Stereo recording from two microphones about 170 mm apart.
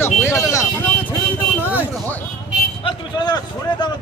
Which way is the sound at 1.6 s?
10° right (ahead or behind).